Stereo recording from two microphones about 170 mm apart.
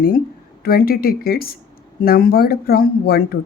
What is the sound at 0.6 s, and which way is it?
A woman's voice, 60° left (ahead or behind).